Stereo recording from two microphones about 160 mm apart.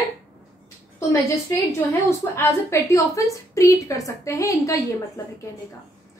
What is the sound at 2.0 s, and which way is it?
A woman's voice, 15° left (ahead or behind).